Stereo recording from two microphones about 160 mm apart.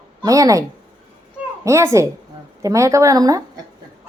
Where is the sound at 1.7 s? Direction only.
20° right (ahead or behind).